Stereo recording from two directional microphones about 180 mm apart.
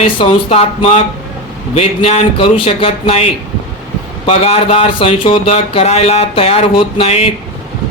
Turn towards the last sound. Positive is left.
turn(degrees=35)  # may be behind; listen again after turning